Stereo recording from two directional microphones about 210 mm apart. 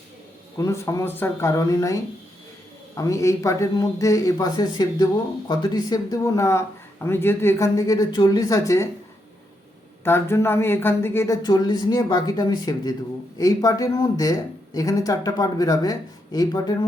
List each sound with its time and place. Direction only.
0.6 s speech: 15° left (ahead or behind)
10.0 s speech: 10° left (ahead or behind)